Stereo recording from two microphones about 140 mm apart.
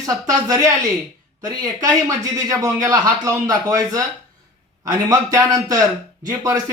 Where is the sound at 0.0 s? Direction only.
25° right (ahead or behind).